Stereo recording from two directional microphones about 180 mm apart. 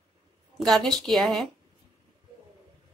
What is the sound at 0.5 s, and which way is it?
Speech, centre (ahead or behind).